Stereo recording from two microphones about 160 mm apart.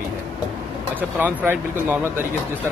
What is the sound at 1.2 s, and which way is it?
Speech, 10° right (ahead or behind).